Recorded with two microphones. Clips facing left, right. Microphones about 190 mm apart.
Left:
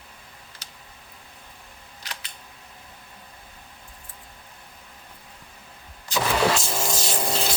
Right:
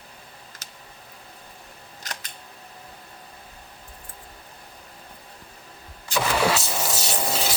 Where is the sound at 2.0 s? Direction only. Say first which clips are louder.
Right 2 dB; 45° right (ahead or behind).